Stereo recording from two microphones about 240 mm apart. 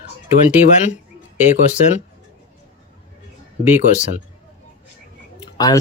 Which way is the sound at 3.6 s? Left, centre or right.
Left.